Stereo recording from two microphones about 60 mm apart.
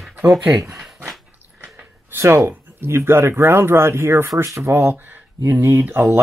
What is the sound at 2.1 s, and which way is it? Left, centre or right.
Speech, right.